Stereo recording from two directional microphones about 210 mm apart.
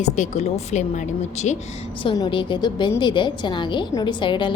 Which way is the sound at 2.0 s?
20° left (ahead or behind).